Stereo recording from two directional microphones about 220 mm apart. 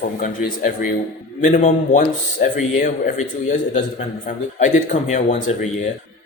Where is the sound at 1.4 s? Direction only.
35° left (ahead or behind).